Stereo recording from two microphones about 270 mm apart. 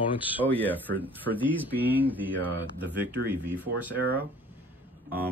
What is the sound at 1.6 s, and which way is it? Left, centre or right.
Speech, centre.